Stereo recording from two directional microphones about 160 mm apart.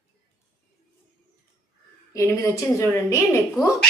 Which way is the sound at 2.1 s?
20° left (ahead or behind).